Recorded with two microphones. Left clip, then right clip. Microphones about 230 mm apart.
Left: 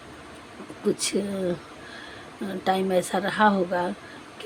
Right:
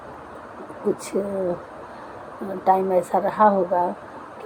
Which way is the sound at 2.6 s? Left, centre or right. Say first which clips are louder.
Right 5 dB; left.